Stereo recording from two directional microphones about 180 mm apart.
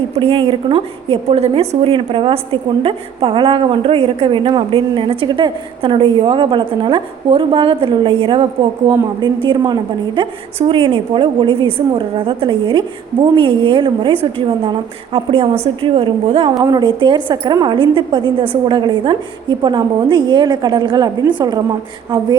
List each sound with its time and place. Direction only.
0.2 s a woman's voice: 30° right (ahead or behind)